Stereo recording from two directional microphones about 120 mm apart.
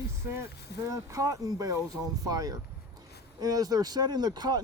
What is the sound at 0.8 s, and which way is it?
Speech, 25° right (ahead or behind).